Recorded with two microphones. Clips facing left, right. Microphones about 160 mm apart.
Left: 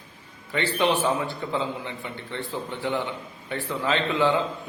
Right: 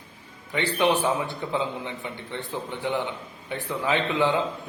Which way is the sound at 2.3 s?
20° right (ahead or behind).